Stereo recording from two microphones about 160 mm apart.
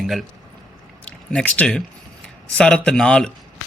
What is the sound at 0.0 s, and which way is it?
Speech, centre (ahead or behind).